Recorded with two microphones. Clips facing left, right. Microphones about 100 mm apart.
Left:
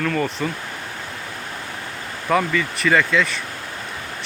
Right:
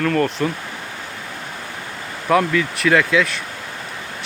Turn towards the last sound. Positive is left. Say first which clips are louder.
# right 2 dB
turn(degrees=0)  # may be behind; listen again after turning